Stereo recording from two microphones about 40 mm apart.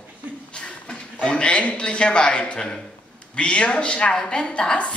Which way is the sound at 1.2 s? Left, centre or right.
Left.